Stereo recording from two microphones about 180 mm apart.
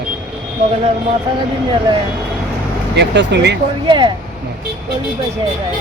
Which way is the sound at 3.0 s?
70° right (ahead or behind).